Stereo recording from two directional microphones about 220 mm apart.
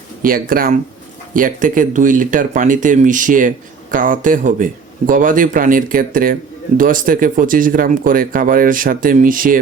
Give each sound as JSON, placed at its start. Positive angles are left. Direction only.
{"t": 0.2, "sound": "speech", "side_deg": -40}